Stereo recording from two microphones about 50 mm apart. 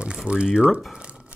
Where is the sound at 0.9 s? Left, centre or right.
Centre.